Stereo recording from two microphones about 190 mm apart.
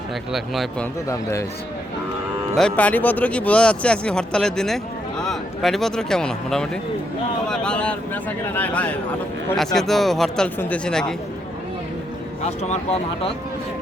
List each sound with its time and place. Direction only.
0.3 s speech: centre (ahead or behind)
1.0 s speech: 15° left (ahead or behind)
2.6 s speech: 5° left (ahead or behind)
12.5 s speech: 35° left (ahead or behind)